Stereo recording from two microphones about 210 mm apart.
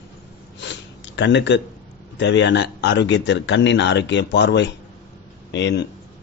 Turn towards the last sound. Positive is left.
turn(degrees=55)  # may be behind; listen again after turning